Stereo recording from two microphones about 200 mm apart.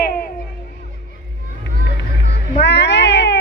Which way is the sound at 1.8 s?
55° left (ahead or behind).